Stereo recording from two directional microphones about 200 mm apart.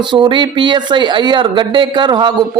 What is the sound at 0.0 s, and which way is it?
Speech, 25° right (ahead or behind).